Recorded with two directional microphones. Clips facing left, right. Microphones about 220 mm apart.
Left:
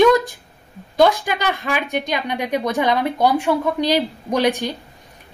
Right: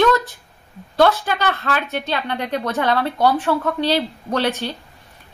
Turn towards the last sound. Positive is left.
turn(degrees=15)  # may be behind; listen again after turning